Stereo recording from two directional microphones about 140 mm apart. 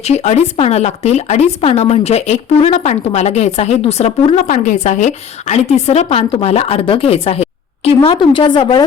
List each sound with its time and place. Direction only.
0.0 s speech: 50° left (ahead or behind)
4.5 s speech: 60° left (ahead or behind)
7.9 s a woman's voice: 35° left (ahead or behind)